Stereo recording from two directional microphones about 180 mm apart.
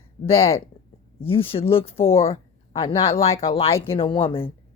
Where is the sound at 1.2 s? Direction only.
30° left (ahead or behind).